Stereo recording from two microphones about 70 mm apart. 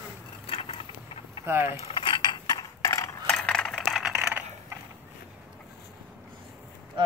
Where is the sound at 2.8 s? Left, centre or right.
Left.